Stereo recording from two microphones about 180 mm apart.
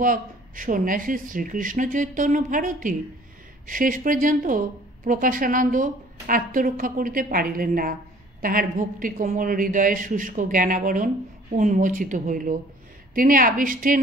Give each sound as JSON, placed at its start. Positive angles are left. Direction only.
{"t": 0.0, "sound": "a woman's voice", "side_deg": -50}